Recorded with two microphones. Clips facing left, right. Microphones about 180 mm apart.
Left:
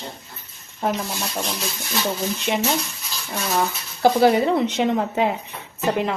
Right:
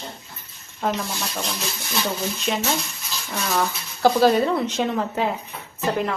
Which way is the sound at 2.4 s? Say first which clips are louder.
Left 2 dB; 20° left (ahead or behind).